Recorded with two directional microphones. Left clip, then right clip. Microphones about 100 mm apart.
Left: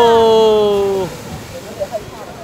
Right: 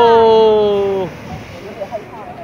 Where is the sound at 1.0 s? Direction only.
10° left (ahead or behind).